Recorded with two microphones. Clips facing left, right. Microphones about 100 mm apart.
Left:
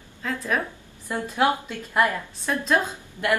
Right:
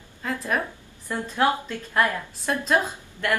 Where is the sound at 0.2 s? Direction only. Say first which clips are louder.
Even; 5° right (ahead or behind).